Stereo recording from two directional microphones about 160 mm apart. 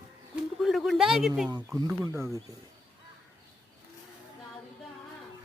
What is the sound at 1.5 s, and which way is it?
Speech, 25° right (ahead or behind).